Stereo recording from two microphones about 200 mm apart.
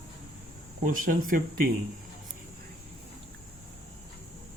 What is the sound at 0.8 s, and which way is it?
Speech, 45° right (ahead or behind).